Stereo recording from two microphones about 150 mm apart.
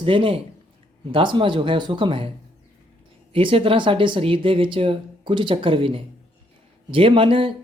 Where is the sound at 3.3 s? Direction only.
35° right (ahead or behind).